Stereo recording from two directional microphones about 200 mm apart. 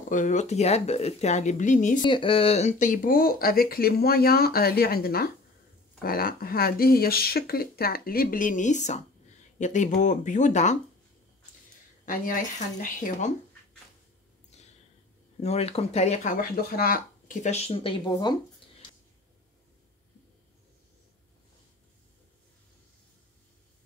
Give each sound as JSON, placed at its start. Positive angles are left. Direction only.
{"t": 0.1, "sound": "speech", "side_deg": 40}
{"t": 2.0, "sound": "speech", "side_deg": 25}
{"t": 12.1, "sound": "speech", "side_deg": 40}
{"t": 15.4, "sound": "speech", "side_deg": 30}